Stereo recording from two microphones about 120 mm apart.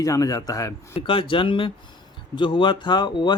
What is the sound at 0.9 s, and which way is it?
Speech, 45° left (ahead or behind).